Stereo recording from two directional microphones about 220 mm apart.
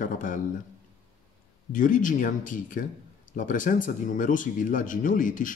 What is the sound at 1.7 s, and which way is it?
Speech, 35° left (ahead or behind).